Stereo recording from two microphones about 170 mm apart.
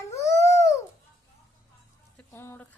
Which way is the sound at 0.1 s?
15° left (ahead or behind).